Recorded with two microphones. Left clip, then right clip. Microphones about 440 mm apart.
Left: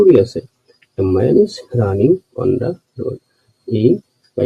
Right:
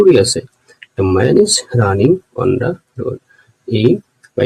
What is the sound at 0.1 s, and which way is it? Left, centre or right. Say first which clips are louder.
Speech: right 1 dB; left.